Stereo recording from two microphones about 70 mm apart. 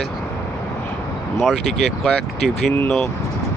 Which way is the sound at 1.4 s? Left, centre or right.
Centre.